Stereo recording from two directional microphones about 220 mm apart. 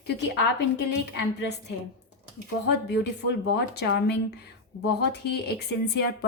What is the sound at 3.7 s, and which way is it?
A woman's voice, 50° left (ahead or behind).